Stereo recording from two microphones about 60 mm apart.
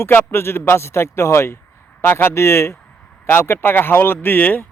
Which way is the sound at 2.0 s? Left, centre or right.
Left.